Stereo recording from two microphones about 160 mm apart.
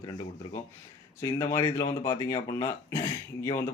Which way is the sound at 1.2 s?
25° left (ahead or behind).